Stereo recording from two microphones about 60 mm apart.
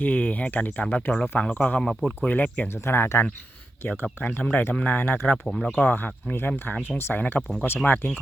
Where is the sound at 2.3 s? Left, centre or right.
Left.